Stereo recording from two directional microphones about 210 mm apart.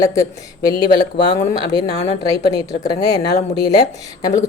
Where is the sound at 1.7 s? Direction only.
25° right (ahead or behind).